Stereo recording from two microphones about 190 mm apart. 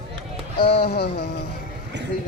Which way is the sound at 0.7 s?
60° left (ahead or behind).